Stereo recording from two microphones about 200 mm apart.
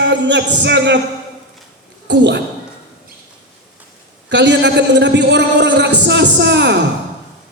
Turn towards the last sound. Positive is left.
turn(degrees=-60)  # may be behind; listen again after turning